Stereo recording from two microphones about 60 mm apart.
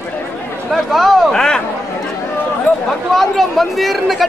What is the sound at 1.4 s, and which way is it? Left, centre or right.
Speech, centre.